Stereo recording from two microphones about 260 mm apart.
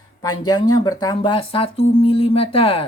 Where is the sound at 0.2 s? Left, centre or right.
Centre.